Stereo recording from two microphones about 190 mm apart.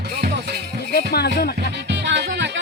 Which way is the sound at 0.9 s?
55° left (ahead or behind).